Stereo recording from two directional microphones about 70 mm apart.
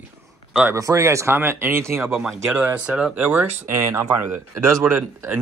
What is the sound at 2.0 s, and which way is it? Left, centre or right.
Speech, centre.